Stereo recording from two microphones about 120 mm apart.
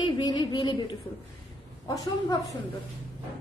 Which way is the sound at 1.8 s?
30° left (ahead or behind).